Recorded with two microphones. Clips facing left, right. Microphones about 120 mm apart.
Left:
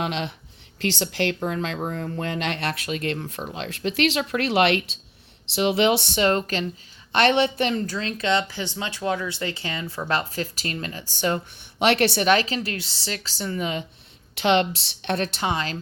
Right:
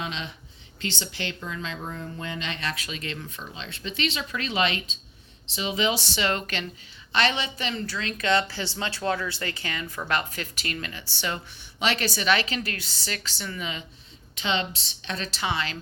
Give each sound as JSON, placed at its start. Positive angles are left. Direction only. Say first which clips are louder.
{"t": 0.0, "sound": "speech", "louder": "left 7 dB", "side_deg": 65}
{"t": 0.8, "sound": "a woman's voice", "louder": "left 8 dB", "side_deg": 85}
{"t": 1.4, "sound": "speech", "louder": "left 8 dB", "side_deg": 60}
{"t": 3.4, "sound": "speech", "louder": "left 8 dB", "side_deg": 65}
{"t": 6.1, "sound": "speech", "louder": "left 6 dB", "side_deg": 40}
{"t": 7.1, "sound": "speech", "louder": "left 7 dB", "side_deg": 55}
{"t": 7.8, "sound": "speech", "louder": "left 4 dB", "side_deg": 40}
{"t": 8.3, "sound": "a woman's voice", "louder": "even", "side_deg": 20}
{"t": 11.8, "sound": "speech", "louder": "left 7 dB", "side_deg": 60}
{"t": 12.3, "sound": "a woman's voice", "louder": "left 4 dB", "side_deg": 35}
{"t": 14.3, "sound": "speech", "louder": "left 8 dB", "side_deg": 65}